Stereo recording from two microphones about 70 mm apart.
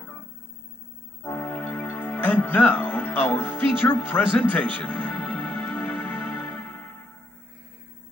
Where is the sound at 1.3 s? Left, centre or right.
Left.